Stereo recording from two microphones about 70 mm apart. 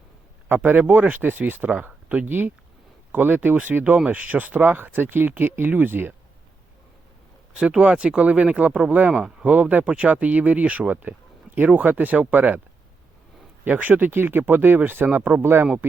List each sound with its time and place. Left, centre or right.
0.4 s speech: right
7.6 s speech: centre
9.5 s speech: right
13.7 s speech: right